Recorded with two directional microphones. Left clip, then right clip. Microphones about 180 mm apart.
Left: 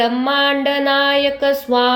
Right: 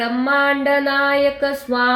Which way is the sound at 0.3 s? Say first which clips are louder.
Right 3 dB; 25° left (ahead or behind).